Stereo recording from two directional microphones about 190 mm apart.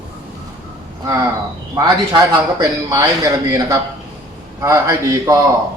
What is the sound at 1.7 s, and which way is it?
A man's voice, 20° right (ahead or behind).